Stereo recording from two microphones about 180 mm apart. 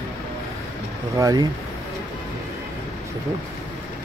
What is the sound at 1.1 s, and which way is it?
Speech, 20° right (ahead or behind).